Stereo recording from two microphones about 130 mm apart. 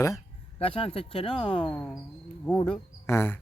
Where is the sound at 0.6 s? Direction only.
45° left (ahead or behind).